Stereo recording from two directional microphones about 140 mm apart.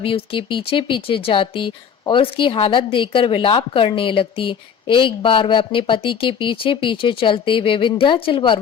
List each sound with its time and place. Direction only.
0.0 s speech: 40° left (ahead or behind)